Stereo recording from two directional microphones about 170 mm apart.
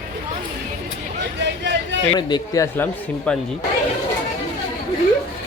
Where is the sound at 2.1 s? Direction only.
20° left (ahead or behind).